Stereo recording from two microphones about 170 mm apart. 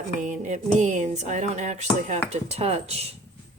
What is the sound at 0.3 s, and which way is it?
Speech, 45° right (ahead or behind).